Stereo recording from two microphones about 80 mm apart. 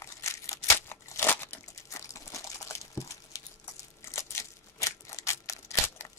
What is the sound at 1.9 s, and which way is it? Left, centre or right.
Crunch, left.